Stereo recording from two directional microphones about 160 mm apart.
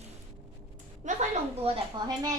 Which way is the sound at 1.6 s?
25° right (ahead or behind).